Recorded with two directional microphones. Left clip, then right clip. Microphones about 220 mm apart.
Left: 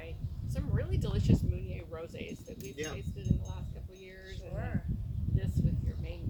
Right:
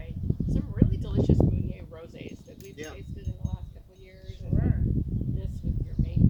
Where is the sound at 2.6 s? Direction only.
10° right (ahead or behind).